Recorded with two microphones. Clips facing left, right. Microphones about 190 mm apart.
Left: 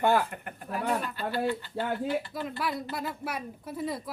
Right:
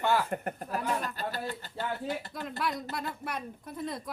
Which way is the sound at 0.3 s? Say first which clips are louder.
Right 4 dB; 40° right (ahead or behind).